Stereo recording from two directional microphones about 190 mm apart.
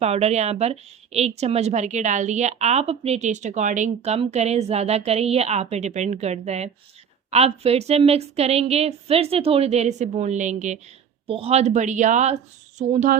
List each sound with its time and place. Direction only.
0.0 s a woman's voice: 35° right (ahead or behind)